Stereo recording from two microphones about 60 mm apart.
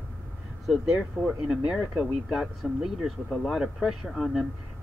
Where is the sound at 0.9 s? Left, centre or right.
Centre.